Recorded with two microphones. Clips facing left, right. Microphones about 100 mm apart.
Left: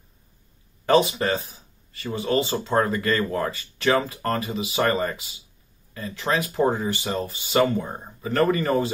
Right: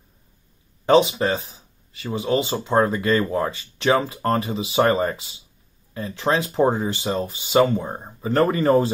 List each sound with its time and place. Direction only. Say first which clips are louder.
0.8 s speech: right 3 dB; 20° right (ahead or behind)